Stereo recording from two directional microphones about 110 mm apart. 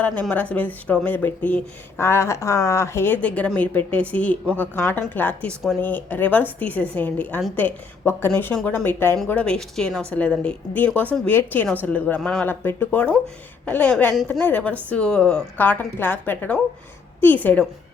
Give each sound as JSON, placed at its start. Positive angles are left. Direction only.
{"t": 0.0, "sound": "a woman's voice", "side_deg": 15}